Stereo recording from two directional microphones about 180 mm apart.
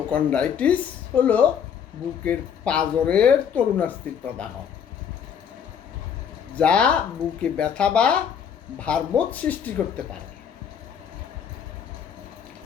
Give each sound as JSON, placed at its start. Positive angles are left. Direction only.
{"t": 0.1, "sound": "speech", "side_deg": 10}
{"t": 6.6, "sound": "speech", "side_deg": 5}